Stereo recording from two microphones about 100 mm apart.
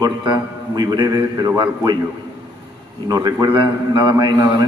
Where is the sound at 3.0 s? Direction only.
40° right (ahead or behind).